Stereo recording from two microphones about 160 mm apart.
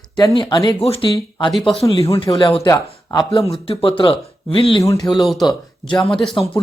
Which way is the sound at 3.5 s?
35° left (ahead or behind).